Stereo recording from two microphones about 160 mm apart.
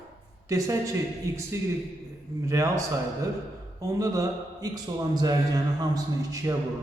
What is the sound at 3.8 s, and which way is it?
A man's voice, 20° right (ahead or behind).